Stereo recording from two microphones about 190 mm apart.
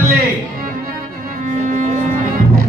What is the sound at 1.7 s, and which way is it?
Music, 45° right (ahead or behind).